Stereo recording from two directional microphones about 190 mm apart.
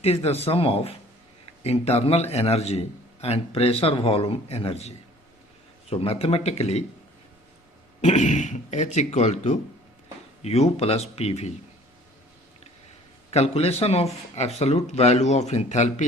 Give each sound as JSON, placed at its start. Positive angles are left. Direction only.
{"t": 0.0, "sound": "a man's voice", "side_deg": 35}
{"t": 8.0, "sound": "a man's voice", "side_deg": 40}
{"t": 13.3, "sound": "a man's voice", "side_deg": 35}